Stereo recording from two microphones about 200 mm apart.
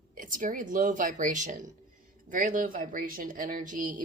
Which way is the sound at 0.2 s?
40° right (ahead or behind).